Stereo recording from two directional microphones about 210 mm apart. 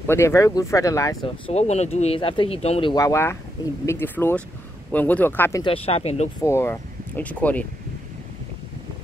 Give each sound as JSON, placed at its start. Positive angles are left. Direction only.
{"t": 0.0, "sound": "speech", "side_deg": 10}
{"t": 1.5, "sound": "speech", "side_deg": 30}
{"t": 5.6, "sound": "speech", "side_deg": 25}
{"t": 6.4, "sound": "speech", "side_deg": 10}